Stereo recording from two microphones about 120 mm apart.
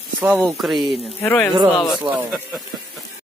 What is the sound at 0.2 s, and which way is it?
Speech, 10° right (ahead or behind).